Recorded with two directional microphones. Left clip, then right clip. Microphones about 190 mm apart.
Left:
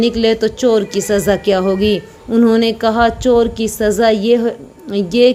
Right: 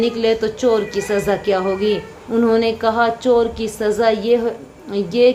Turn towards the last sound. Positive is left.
turn(degrees=45)  # may be behind; listen again after turning